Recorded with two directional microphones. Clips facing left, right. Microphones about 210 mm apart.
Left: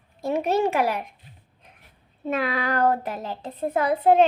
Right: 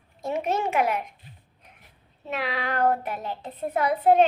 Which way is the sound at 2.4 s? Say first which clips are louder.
Left 1 dB; 45° left (ahead or behind).